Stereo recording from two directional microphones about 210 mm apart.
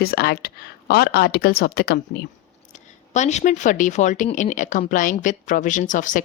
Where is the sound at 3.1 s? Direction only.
35° left (ahead or behind).